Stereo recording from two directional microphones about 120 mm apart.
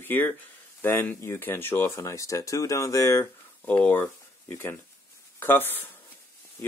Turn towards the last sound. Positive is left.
turn(degrees=20)  # may be behind; listen again after turning